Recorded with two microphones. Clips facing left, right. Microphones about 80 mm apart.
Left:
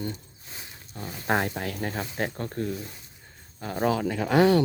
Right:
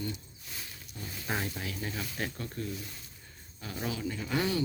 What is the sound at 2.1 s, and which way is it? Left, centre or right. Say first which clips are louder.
Speech: left 7 dB; left.